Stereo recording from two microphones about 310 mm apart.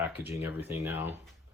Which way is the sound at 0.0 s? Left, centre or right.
Centre.